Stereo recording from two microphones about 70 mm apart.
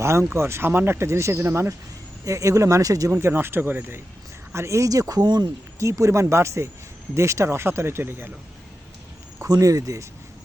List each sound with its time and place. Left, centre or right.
0.0 s speech: right
2.2 s speech: right
3.1 s speech: right
4.5 s speech: right
5.8 s speech: right
9.5 s speech: right